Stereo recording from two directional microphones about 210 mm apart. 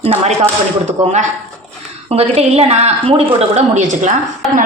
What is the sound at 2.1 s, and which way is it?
A woman's voice, 30° right (ahead or behind).